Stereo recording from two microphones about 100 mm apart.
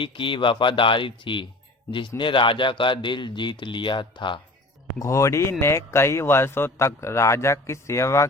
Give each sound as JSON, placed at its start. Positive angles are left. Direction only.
{"t": 0.0, "sound": "a man's voice", "side_deg": 60}
{"t": 4.9, "sound": "speech", "side_deg": 30}